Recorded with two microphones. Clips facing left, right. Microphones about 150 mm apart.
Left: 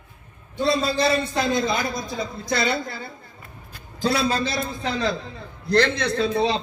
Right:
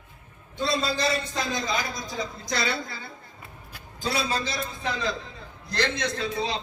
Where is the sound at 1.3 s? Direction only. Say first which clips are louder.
Left 6 dB; 60° left (ahead or behind).